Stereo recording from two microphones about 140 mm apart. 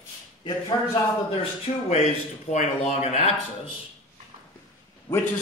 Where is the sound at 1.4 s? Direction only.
50° left (ahead or behind).